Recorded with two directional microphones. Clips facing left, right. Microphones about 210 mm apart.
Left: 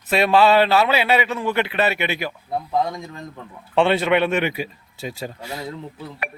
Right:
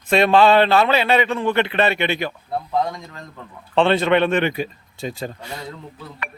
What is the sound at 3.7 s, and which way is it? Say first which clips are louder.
A man's voice: right 1 dB; 10° left (ahead or behind).